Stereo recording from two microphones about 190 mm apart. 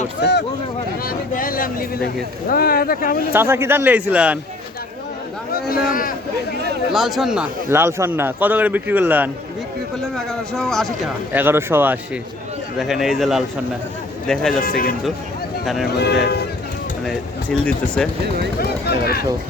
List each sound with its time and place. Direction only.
0.2 s a sound: 65° left (ahead or behind)
1.0 s a sound: 50° left (ahead or behind)
2.5 s speech: 50° left (ahead or behind)
3.3 s speech: 15° right (ahead or behind)
5.9 s speech: 50° left (ahead or behind)
6.9 s speech: centre (ahead or behind)
7.7 s speech: 15° right (ahead or behind)
10.2 s speech: centre (ahead or behind)
11.3 s speech: 10° right (ahead or behind)
14.6 s speech: 50° left (ahead or behind)
15.6 s speech: centre (ahead or behind)
15.9 s speech: 60° left (ahead or behind)
17.1 s speech: 5° left (ahead or behind)